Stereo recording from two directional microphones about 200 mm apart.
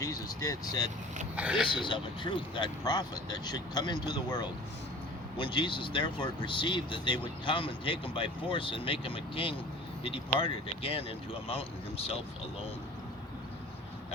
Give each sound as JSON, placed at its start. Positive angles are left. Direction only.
{"t": 0.0, "sound": "speech", "side_deg": 15}
{"t": 1.4, "sound": "speech", "side_deg": -5}
{"t": 1.7, "sound": "speech", "side_deg": 25}